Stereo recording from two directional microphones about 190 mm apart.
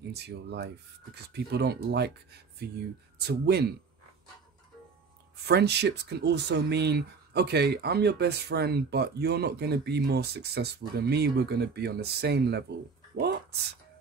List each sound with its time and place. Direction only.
0.1 s speech: 60° right (ahead or behind)
5.5 s speech: 60° right (ahead or behind)
13.1 s a sound: 60° right (ahead or behind)